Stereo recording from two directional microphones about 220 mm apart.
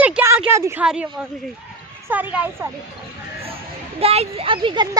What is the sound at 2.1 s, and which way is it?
Speech, 10° right (ahead or behind).